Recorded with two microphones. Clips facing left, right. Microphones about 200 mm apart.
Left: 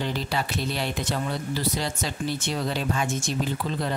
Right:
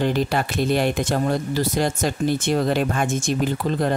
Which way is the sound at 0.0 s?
55° right (ahead or behind).